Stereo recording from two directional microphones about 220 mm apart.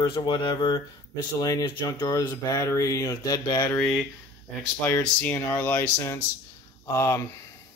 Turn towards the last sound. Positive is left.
turn(degrees=15)  # may be behind; listen again after turning